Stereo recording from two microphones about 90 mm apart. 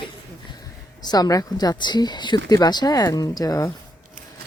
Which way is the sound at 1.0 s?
45° left (ahead or behind).